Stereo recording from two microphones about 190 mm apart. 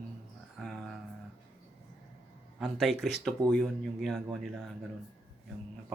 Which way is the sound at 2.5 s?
Centre (ahead or behind).